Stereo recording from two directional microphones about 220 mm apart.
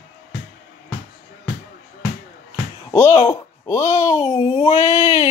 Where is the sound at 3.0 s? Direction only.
30° left (ahead or behind).